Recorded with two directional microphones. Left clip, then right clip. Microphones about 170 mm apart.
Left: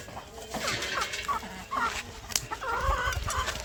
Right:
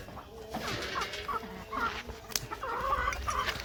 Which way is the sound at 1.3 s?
40° left (ahead or behind).